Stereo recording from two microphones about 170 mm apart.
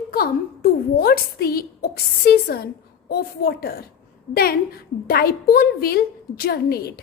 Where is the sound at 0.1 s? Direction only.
60° left (ahead or behind).